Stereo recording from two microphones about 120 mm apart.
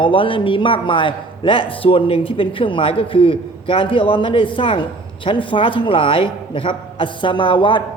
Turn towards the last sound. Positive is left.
turn(degrees=40)  # may be behind; listen again after turning